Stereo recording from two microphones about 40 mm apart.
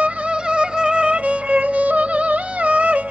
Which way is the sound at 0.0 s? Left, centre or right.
Right.